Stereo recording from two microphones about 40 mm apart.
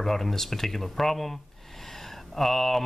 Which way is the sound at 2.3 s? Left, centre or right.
Centre.